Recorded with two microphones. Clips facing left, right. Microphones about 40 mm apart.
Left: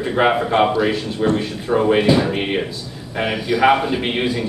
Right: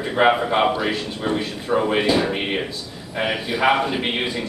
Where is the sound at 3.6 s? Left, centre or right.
Centre.